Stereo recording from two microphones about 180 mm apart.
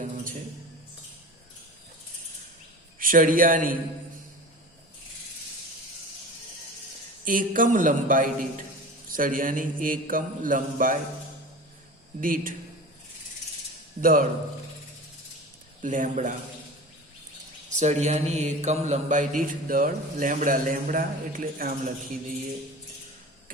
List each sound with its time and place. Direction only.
3.0 s mantra: 50° right (ahead or behind)
7.3 s mantra: 50° right (ahead or behind)
12.2 s mantra: 50° right (ahead or behind)
14.0 s mantra: 50° right (ahead or behind)
15.8 s mantra: 45° right (ahead or behind)
17.7 s mantra: 40° right (ahead or behind)